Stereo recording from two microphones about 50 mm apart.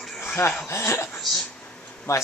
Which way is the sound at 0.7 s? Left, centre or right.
Left.